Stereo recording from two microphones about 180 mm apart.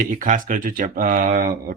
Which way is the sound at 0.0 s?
45° right (ahead or behind).